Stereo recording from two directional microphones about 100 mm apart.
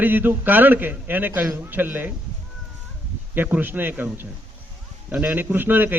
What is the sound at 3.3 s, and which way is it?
A man's voice, 20° right (ahead or behind).